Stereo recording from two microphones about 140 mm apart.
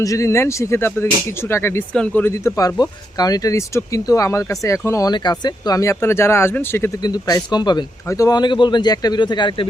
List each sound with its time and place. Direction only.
0.0 s speech: 25° left (ahead or behind)
7.0 s a man's voice: 25° left (ahead or behind)